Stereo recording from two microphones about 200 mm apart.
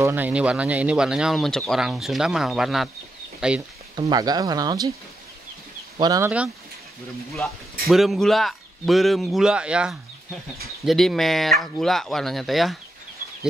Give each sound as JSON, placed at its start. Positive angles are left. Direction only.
{"t": 0.0, "sound": "speech", "side_deg": -10}
{"t": 3.9, "sound": "speech", "side_deg": -20}
{"t": 5.9, "sound": "speech", "side_deg": -20}
{"t": 7.8, "sound": "speech", "side_deg": 0}